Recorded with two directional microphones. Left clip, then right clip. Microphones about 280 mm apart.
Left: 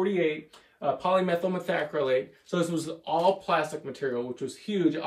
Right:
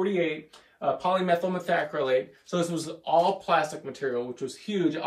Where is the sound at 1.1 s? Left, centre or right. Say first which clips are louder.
Left 1 dB; centre.